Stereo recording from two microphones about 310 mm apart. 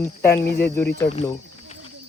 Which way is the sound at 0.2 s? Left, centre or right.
Centre.